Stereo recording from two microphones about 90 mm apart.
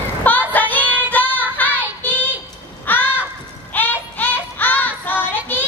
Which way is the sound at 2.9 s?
20° left (ahead or behind).